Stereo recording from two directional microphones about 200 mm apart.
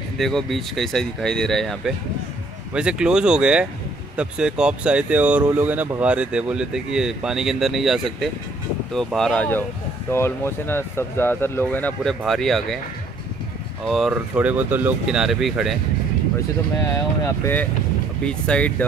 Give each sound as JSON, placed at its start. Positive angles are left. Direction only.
{"t": 0.2, "sound": "speech", "side_deg": 0}
{"t": 13.8, "sound": "speech", "side_deg": 0}
{"t": 16.8, "sound": "speech", "side_deg": 10}